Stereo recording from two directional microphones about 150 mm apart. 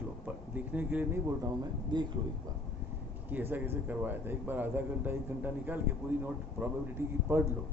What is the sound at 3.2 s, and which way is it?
A man's voice, 10° right (ahead or behind).